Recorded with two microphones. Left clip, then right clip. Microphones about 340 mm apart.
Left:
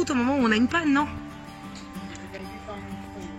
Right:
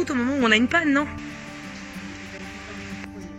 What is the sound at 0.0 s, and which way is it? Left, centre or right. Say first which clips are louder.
Speech: right 1 dB; centre.